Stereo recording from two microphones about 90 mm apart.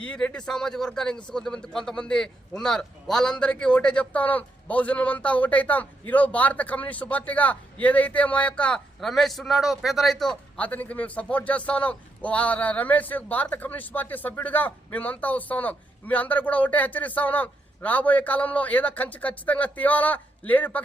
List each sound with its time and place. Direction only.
0.0 s a man's voice: 10° left (ahead or behind)
9.0 s a man's voice: 5° left (ahead or behind)
10.6 s a man's voice: 15° left (ahead or behind)